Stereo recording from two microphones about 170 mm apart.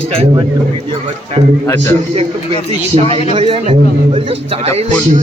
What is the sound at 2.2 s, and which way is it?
A man's voice, 35° right (ahead or behind).